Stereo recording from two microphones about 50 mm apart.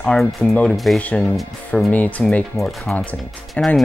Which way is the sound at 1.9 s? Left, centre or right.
Left.